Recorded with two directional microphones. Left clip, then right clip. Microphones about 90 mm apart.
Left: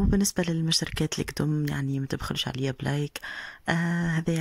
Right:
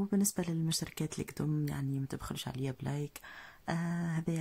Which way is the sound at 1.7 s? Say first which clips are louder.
Left 9 dB; 35° left (ahead or behind).